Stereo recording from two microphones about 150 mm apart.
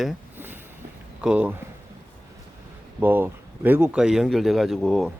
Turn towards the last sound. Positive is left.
turn(degrees=0)  # may be behind; listen again after turning